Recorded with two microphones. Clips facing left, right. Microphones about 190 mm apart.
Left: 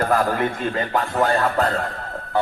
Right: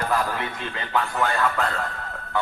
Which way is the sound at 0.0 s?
50° left (ahead or behind).